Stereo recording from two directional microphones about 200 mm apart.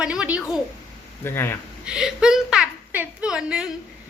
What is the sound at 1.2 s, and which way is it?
Speech, 10° left (ahead or behind).